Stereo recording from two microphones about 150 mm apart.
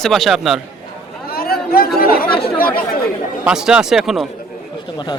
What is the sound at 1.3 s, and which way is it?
Chatter, 90° left.